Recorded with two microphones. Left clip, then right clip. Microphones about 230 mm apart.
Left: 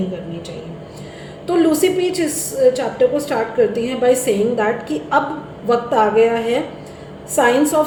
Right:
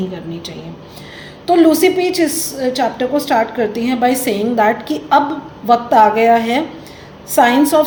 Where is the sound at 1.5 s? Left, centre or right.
Right.